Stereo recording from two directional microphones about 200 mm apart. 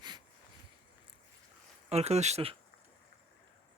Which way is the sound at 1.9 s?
30° right (ahead or behind).